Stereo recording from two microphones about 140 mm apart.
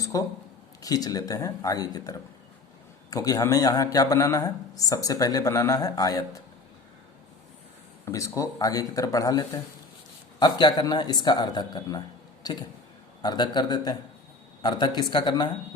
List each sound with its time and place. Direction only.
0.0 s a sound: 25° left (ahead or behind)
0.8 s a man's voice: 25° left (ahead or behind)
8.0 s a man's voice: 25° left (ahead or behind)